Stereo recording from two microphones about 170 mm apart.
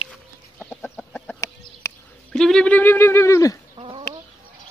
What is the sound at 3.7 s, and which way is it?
Chicken, 35° right (ahead or behind).